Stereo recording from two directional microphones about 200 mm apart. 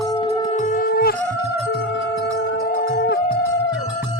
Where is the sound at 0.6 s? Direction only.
45° left (ahead or behind).